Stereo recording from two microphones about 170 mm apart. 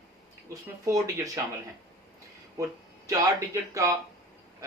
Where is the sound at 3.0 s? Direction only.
20° right (ahead or behind).